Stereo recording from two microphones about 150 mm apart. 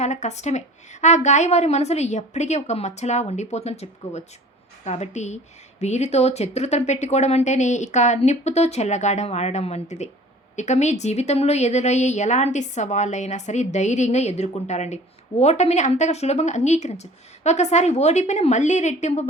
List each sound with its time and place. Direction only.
0.0 s a woman's voice: 50° left (ahead or behind)